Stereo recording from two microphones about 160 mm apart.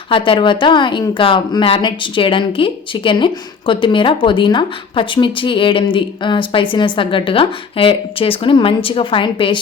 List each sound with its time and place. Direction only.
0.1 s speech: 30° left (ahead or behind)